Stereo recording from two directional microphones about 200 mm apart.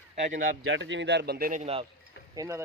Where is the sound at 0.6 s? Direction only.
65° right (ahead or behind); by 1.6 s 45° right (ahead or behind).